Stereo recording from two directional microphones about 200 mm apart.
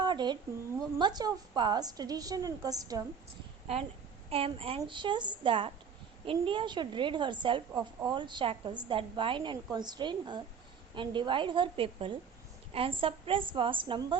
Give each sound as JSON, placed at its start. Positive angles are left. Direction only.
{"t": 0.0, "sound": "a sound", "side_deg": -20}
{"t": 0.9, "sound": "a woman's voice", "side_deg": -20}
{"t": 4.3, "sound": "a woman's voice", "side_deg": -30}